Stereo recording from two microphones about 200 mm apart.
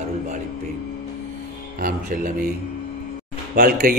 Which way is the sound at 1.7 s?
45° right (ahead or behind).